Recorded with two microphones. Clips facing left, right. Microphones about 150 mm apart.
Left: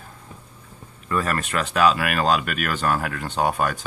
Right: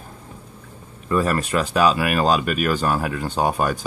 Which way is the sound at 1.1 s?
10° right (ahead or behind).